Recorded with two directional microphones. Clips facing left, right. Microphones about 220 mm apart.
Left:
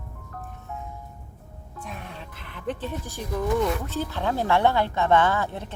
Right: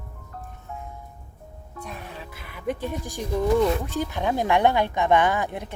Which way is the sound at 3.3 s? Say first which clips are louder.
Right 3 dB; 25° right (ahead or behind).